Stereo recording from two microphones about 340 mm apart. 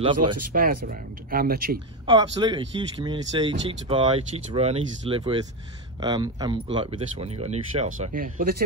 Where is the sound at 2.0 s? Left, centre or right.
Centre.